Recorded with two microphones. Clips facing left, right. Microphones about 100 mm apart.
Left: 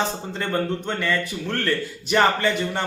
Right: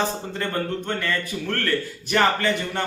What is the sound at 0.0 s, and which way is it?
Speech, 20° left (ahead or behind).